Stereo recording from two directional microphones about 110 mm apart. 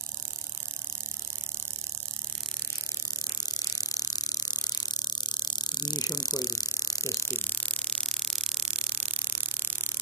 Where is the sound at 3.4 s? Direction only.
35° left (ahead or behind); by 8.0 s 15° left (ahead or behind).